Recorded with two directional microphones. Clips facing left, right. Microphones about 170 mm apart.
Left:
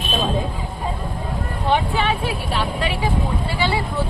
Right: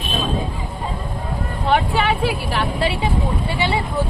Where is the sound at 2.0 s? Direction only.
75° right (ahead or behind).